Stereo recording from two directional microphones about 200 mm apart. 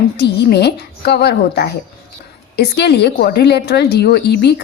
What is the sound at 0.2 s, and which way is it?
A woman's voice, 55° left (ahead or behind).